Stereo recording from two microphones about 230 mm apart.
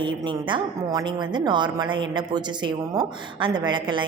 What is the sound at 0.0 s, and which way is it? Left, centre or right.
A woman's voice, right.